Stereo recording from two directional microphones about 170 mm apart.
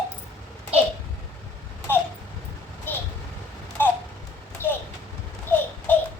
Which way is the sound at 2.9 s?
10° left (ahead or behind).